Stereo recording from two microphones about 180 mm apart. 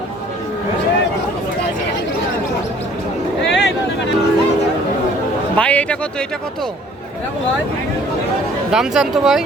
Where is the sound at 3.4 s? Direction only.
80° left.